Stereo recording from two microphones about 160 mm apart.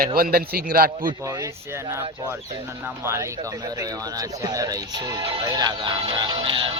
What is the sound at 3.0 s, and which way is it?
Speech, 15° right (ahead or behind).